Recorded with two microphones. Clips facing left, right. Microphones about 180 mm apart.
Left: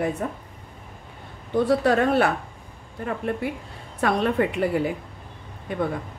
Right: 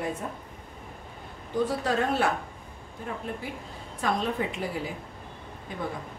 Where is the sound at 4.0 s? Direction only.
65° left (ahead or behind).